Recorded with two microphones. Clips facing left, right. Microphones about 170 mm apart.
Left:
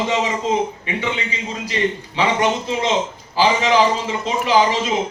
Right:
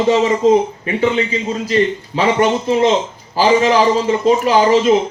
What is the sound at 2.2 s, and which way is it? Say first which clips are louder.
A man's voice: right 4 dB; 50° right (ahead or behind).